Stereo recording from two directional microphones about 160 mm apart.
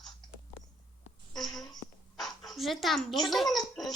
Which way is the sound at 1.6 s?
25° left (ahead or behind).